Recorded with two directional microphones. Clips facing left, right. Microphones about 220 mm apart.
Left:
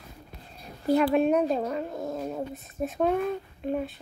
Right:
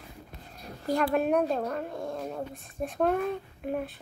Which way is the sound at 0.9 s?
Centre (ahead or behind).